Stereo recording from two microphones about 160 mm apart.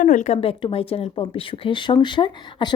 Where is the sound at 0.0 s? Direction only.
50° left (ahead or behind).